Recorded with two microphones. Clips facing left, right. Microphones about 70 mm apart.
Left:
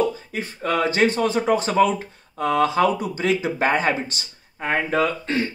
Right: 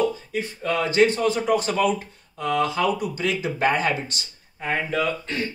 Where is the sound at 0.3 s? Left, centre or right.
Left.